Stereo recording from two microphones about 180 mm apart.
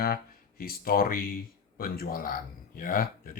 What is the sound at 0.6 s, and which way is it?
Speech, 55° left (ahead or behind).